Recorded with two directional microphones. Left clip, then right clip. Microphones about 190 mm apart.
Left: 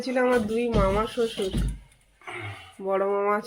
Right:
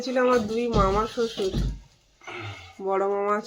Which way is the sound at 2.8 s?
5° left (ahead or behind).